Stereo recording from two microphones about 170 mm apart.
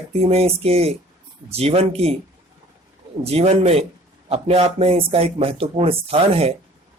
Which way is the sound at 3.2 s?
40° right (ahead or behind).